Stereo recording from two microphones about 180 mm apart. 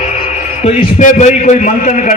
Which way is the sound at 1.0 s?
45° left (ahead or behind).